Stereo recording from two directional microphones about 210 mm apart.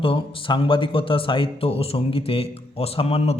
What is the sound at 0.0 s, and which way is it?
Speech, 25° left (ahead or behind).